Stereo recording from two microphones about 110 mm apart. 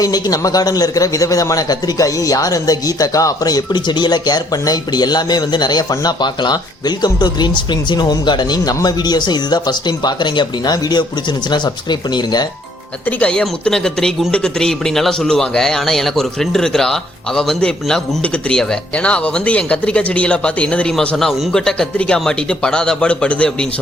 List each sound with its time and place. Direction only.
0.0 s a man's voice: 35° left (ahead or behind)
13.1 s speech: 10° left (ahead or behind)